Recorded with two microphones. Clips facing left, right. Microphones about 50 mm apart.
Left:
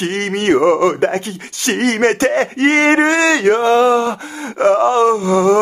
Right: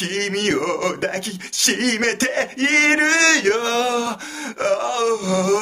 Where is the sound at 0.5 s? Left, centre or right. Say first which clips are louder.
Left 11 dB; left.